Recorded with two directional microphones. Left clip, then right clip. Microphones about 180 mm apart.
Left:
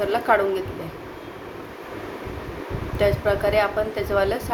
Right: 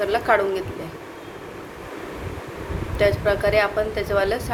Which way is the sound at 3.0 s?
5° left (ahead or behind).